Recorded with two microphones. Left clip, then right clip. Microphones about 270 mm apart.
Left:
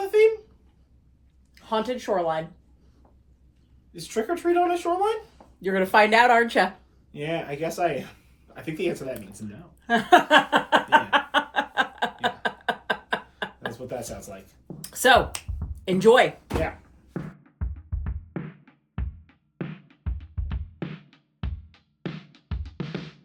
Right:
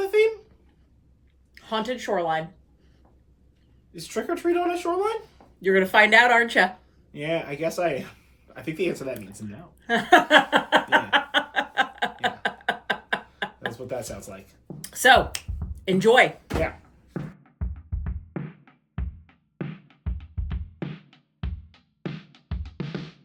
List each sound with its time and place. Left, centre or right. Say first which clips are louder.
1.5 s speech: left 1 dB; centre
3.9 s speech: left 1 dB; centre
5.6 s speech: right 1 dB; centre
7.1 s speech: right 2 dB; centre
9.8 s a sound: even; centre
13.8 s speech: right 1 dB; centre
14.7 s a sound: right 1 dB; centre
17.2 s music: even; centre